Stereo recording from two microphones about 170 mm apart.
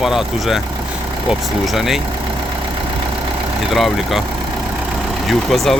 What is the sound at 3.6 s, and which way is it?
Speech, centre (ahead or behind).